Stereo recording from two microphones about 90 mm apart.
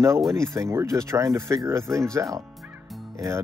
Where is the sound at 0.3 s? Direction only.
30° right (ahead or behind).